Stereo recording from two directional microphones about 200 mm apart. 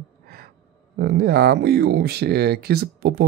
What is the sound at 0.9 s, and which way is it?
Speech, 50° right (ahead or behind).